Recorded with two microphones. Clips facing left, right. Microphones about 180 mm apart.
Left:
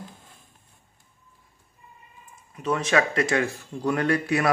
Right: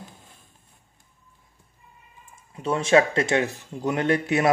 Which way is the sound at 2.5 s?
25° right (ahead or behind).